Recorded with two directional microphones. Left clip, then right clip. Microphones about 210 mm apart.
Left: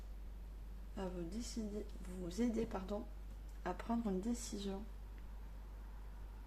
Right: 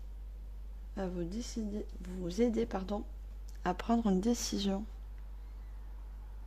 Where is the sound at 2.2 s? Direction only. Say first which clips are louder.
Right 8 dB; 45° right (ahead or behind).